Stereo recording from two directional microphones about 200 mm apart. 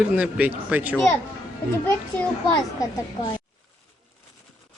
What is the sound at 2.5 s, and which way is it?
Speech, 20° left (ahead or behind).